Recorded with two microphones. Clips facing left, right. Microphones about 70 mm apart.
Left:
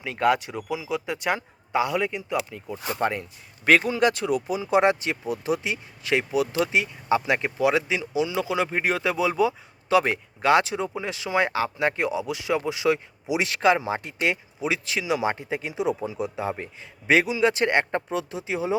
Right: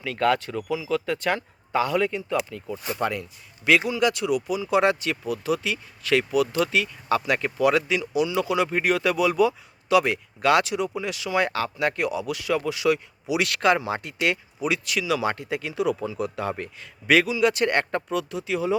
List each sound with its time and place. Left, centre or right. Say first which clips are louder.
0.0 s speech: even; centre
2.9 s speech: left 1 dB; left